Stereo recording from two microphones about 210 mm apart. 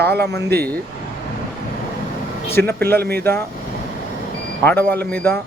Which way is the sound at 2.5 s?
10° left (ahead or behind).